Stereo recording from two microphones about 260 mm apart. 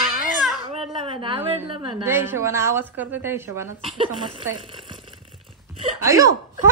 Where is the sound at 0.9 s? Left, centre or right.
Centre.